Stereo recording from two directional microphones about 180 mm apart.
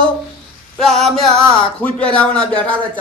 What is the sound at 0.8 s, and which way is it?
Male singing, centre (ahead or behind).